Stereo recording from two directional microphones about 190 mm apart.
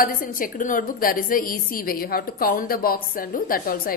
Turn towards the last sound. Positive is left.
turn(degrees=50)  # may be behind; listen again after turning